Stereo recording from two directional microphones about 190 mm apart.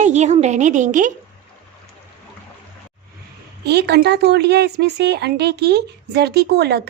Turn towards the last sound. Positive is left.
turn(degrees=-60)  # may be behind; listen again after turning